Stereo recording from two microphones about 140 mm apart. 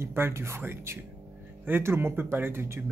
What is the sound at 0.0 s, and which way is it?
Speech, 15° right (ahead or behind).